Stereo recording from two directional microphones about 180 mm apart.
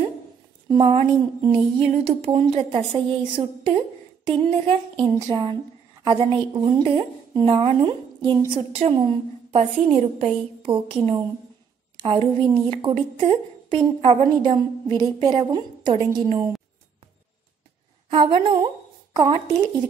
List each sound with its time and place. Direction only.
0.7 s a woman's voice: 25° right (ahead or behind)
12.2 s a woman's voice: 30° right (ahead or behind)
18.1 s a woman's voice: 25° right (ahead or behind)